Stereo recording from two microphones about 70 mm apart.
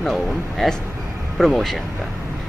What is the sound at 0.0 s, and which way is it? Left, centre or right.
Speech, centre.